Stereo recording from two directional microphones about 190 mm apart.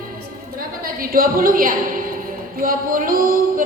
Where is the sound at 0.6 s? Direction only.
50° right (ahead or behind).